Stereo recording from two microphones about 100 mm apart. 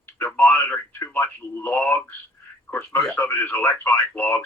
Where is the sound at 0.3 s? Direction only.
20° left (ahead or behind).